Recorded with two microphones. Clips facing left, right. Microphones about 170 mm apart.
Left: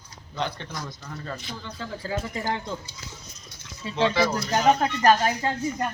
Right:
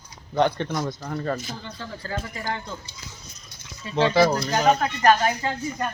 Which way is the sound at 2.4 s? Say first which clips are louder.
Left 2 dB; 20° left (ahead or behind).